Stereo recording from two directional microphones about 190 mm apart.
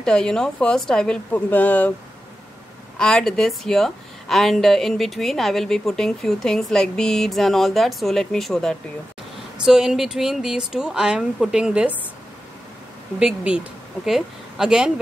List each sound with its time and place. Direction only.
0.0 s a woman's voice: 5° left (ahead or behind)
3.0 s a woman's voice: 5° left (ahead or behind)
13.2 s speech: 5° right (ahead or behind)